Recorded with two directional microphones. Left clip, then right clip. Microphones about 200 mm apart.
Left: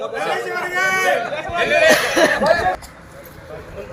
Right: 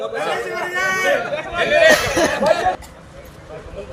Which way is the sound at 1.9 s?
35° left (ahead or behind).